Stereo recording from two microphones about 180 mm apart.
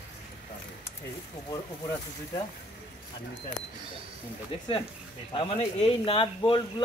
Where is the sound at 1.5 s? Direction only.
15° left (ahead or behind).